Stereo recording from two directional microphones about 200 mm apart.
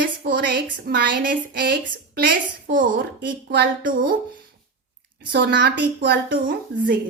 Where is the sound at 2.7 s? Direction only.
40° right (ahead or behind).